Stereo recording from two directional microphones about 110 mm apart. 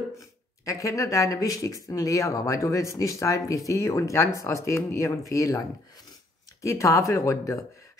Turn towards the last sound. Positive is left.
turn(degrees=30)  # may be behind; listen again after turning